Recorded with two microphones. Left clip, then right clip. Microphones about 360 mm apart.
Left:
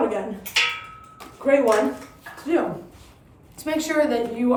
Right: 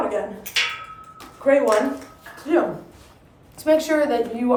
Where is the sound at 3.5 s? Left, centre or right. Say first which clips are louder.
Right 4 dB; centre.